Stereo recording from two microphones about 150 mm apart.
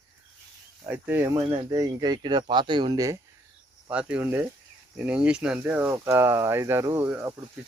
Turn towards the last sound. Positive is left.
turn(degrees=-15)  # may be behind; listen again after turning